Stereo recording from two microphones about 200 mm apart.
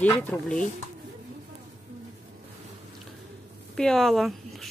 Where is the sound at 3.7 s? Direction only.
5° left (ahead or behind).